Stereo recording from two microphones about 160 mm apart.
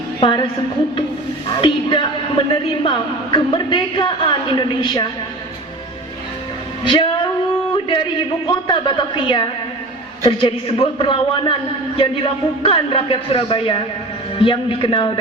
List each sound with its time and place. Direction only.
0.2 s a woman's voice: 30° left (ahead or behind)
1.5 s a woman's voice: 30° left (ahead or behind)
6.8 s a man's voice: 30° left (ahead or behind)
8.4 s a woman's voice: 30° left (ahead or behind)